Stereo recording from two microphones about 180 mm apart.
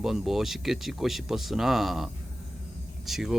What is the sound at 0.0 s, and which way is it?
Speech, centre (ahead or behind).